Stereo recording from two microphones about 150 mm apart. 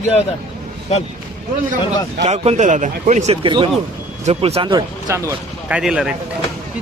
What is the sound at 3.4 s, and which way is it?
Speech, 35° right (ahead or behind).